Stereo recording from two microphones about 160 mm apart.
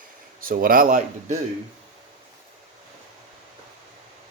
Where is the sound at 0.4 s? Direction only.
60° right (ahead or behind).